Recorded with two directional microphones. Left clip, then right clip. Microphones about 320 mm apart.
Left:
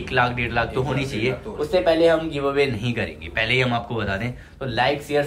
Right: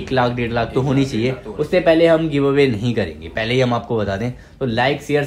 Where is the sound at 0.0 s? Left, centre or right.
Centre.